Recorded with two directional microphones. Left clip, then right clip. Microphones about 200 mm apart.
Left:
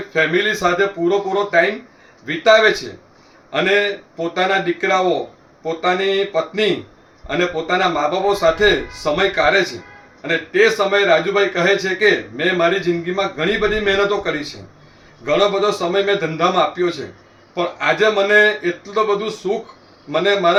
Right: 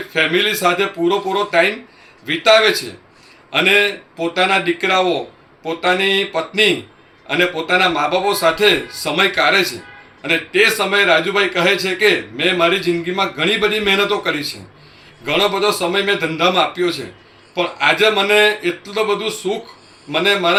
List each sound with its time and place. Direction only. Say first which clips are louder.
0.1 s a man's voice: right 1 dB; 20° left (ahead or behind)
4.4 s a man's voice: right 2 dB; 15° left (ahead or behind)